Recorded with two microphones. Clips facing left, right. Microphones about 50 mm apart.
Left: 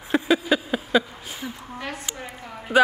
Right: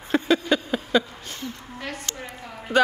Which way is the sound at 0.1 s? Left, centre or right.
Centre.